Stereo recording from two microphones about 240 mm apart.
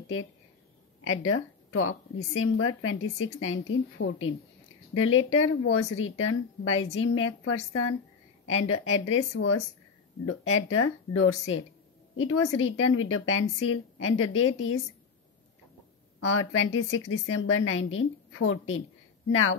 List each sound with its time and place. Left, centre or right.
1.0 s speech: left
16.3 s speech: left